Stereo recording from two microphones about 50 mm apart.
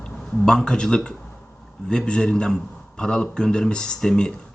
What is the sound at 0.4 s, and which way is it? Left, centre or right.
Speech, centre.